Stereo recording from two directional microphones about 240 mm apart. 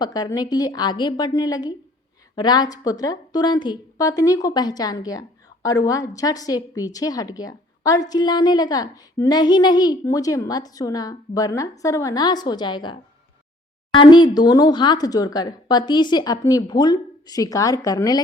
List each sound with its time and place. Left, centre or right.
0.0 s speech: centre